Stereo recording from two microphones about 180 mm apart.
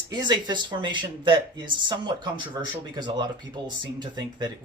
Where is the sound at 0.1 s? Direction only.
25° right (ahead or behind).